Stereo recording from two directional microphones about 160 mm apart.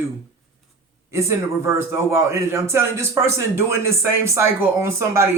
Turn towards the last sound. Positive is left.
turn(degrees=-15)  # may be behind; listen again after turning